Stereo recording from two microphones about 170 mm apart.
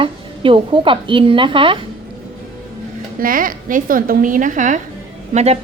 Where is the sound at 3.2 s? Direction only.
55° right (ahead or behind).